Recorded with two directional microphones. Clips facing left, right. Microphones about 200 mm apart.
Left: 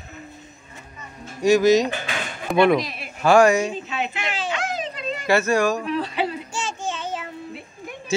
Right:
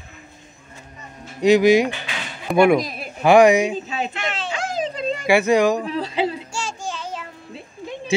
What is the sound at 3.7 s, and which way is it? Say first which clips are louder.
Speech: right 2 dB; 35° right (ahead or behind).